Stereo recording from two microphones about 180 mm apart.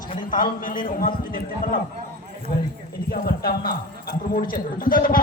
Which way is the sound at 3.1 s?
55° left (ahead or behind).